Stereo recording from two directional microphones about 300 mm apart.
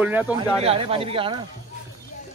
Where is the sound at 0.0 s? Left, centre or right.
Centre.